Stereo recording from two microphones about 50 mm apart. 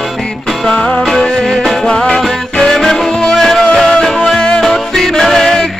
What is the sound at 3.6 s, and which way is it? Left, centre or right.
Music, centre.